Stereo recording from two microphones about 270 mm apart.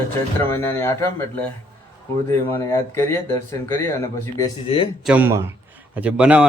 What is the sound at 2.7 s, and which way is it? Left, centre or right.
Speech, centre.